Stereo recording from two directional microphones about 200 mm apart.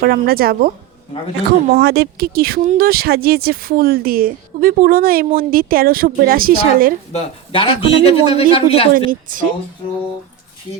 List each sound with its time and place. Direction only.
0.0 s speech: 50° right (ahead or behind)
7.1 s a man's voice: 30° left (ahead or behind)
9.0 s speech: 45° right (ahead or behind)